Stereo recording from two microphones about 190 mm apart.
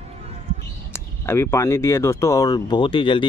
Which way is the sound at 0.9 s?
15° left (ahead or behind).